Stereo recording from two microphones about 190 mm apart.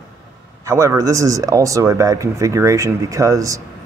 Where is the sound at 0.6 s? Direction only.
15° right (ahead or behind).